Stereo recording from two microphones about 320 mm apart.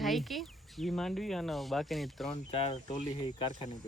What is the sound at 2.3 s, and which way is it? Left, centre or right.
Speech, centre.